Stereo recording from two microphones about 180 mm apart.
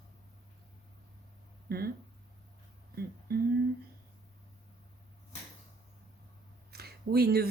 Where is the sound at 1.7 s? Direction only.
60° right (ahead or behind).